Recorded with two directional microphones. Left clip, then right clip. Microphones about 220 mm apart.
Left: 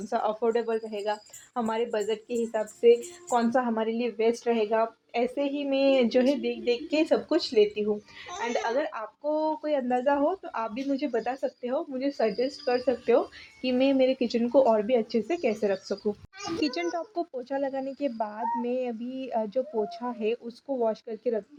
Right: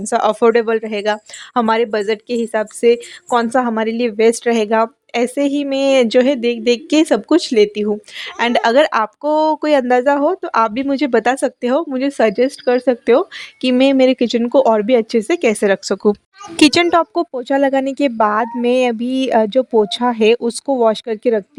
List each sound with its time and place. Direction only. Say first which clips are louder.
0.1 s speech: right 14 dB; 45° right (ahead or behind)